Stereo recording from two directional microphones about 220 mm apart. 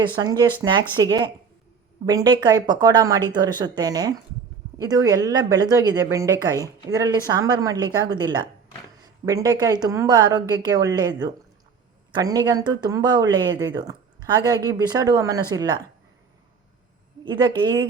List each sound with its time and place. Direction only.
0.2 s speech: 20° right (ahead or behind)
17.2 s speech: 20° right (ahead or behind)